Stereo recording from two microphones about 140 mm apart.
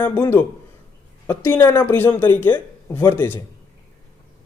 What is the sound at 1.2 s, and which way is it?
Speech, 15° left (ahead or behind).